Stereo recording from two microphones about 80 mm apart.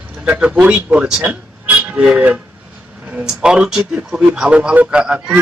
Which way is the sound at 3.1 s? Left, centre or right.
Centre.